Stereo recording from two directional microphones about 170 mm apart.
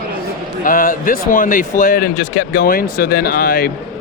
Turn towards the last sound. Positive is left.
turn(degrees=60)  # may be behind; listen again after turning